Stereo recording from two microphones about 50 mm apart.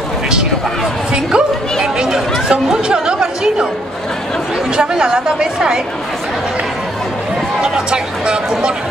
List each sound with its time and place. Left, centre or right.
1.1 s speech: centre
4.7 s speech: centre
7.7 s speech: centre